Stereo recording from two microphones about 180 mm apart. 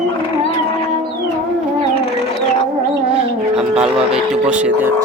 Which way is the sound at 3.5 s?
5° right (ahead or behind).